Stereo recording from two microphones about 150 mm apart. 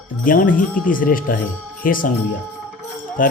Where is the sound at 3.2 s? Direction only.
65° left (ahead or behind).